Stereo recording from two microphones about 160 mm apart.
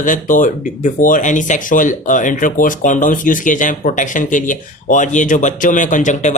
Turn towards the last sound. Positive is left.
turn(degrees=50)  # may be behind; listen again after turning